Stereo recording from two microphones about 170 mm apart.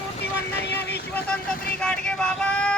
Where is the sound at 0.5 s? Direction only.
80° left.